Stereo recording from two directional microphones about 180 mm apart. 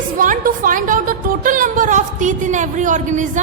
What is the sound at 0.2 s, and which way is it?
A woman's voice, 50° right (ahead or behind).